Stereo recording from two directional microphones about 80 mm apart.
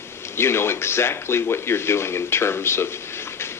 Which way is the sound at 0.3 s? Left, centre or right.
Left.